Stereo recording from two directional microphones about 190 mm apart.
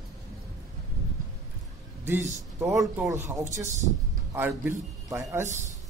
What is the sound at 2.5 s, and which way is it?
A man's voice, 15° right (ahead or behind).